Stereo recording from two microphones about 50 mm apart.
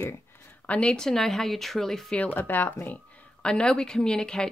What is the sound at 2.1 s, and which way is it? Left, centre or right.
Speech, left.